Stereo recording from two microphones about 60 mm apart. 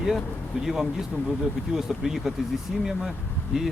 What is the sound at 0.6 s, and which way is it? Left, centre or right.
Speech, centre.